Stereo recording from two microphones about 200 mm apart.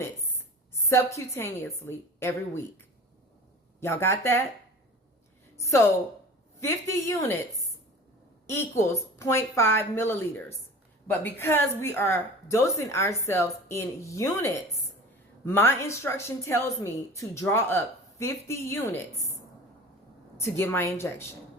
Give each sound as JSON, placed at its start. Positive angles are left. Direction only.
{"t": 0.9, "sound": "a woman's voice", "side_deg": 15}
{"t": 3.8, "sound": "a woman's voice", "side_deg": 10}
{"t": 5.5, "sound": "a woman's voice", "side_deg": 15}
{"t": 8.4, "sound": "a woman's voice", "side_deg": 15}
{"t": 20.3, "sound": "a woman's voice", "side_deg": 10}